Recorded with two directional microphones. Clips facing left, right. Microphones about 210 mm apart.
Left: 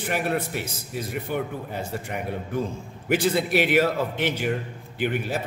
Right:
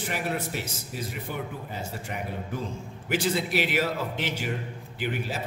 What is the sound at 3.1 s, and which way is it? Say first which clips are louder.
Speech: left 5 dB; 55° left (ahead or behind).